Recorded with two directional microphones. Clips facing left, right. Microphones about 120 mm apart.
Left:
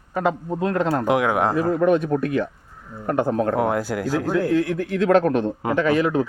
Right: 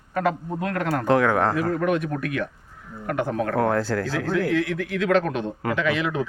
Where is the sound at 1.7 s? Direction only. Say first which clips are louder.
Left 5 dB; 30° left (ahead or behind).